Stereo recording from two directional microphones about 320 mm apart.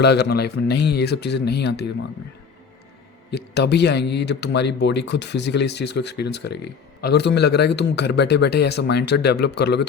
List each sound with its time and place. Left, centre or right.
0.0 s speech: left
3.3 s speech: left